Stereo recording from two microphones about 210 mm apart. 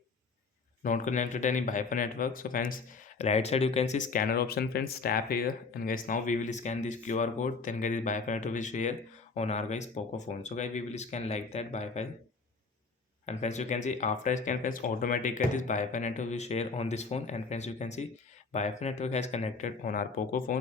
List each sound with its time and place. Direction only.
0.9 s speech: 35° left (ahead or behind)
13.2 s speech: 35° left (ahead or behind)